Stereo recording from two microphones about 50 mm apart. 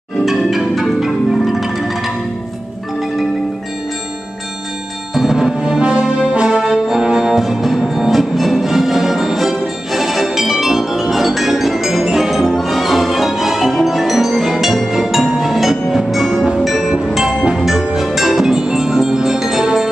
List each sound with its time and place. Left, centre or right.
0.5 s marimba: centre
5.1 s music: centre
5.8 s brass instrument: centre
6.6 s music: centre